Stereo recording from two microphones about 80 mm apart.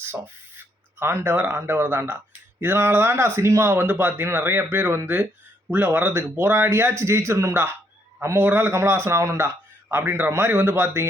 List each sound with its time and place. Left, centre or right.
0.0 s a man's voice: right